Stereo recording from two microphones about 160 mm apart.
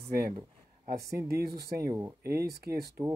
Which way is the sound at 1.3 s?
80° right.